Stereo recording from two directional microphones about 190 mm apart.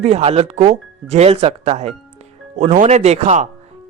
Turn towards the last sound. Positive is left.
turn(degrees=-35)  # may be behind; listen again after turning